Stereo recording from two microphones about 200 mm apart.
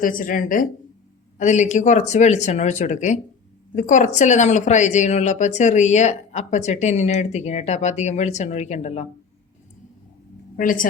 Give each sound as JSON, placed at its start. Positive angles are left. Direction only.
{"t": 0.0, "sound": "speech", "side_deg": 45}
{"t": 10.6, "sound": "speech", "side_deg": 40}